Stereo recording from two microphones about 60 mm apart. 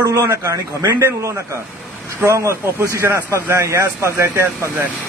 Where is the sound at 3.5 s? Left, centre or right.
Right.